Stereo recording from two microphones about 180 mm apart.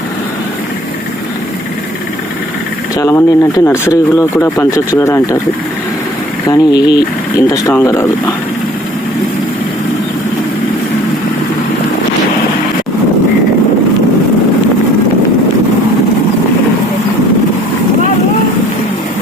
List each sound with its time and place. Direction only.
2.9 s speech: 15° left (ahead or behind)
6.5 s speech: 20° left (ahead or behind)